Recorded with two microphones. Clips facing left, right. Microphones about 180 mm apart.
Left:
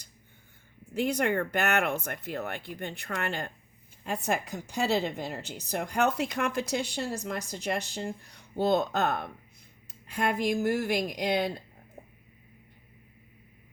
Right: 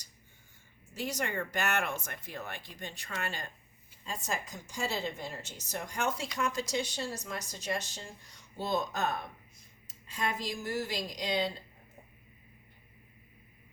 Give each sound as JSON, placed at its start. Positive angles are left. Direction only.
{"t": 0.9, "sound": "a woman's voice", "side_deg": 60}